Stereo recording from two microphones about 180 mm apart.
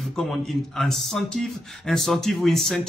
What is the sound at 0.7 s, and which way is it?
Speech, 5° left (ahead or behind).